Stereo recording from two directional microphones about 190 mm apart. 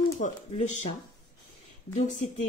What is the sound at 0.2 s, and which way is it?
Speech, 40° left (ahead or behind).